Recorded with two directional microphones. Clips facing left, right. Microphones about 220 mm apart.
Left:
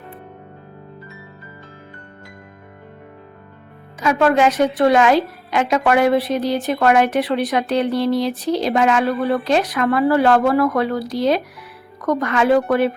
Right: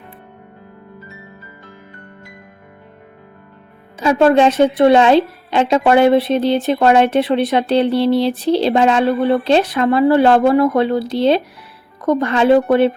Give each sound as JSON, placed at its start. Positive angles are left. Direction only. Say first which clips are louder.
{"t": 4.0, "sound": "a woman's voice", "louder": "right 4 dB", "side_deg": -30}